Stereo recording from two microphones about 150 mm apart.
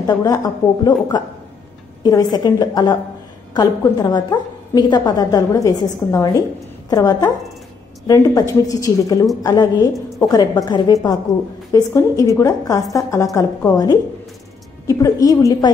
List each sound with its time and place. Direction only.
0.0 s a woman's voice: 25° left (ahead or behind)
2.0 s a woman's voice: 25° left (ahead or behind)